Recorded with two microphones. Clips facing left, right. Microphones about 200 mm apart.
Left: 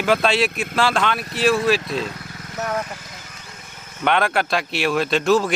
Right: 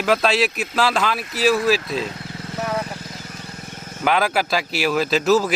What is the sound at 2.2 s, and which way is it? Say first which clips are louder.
Vehicle: right 4 dB; 25° right (ahead or behind).